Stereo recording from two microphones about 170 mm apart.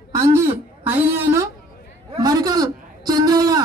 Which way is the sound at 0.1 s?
15° right (ahead or behind).